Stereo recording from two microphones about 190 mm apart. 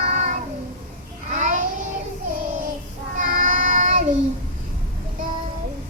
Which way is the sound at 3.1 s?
40° right (ahead or behind).